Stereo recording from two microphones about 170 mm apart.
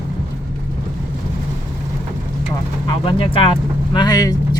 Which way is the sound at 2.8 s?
30° left (ahead or behind).